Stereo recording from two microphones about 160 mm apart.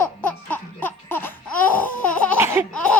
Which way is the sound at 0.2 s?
10° left (ahead or behind).